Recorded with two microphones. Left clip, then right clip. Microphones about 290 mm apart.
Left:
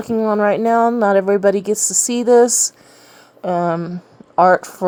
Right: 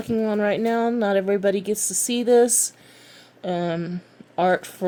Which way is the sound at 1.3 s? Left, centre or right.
Left.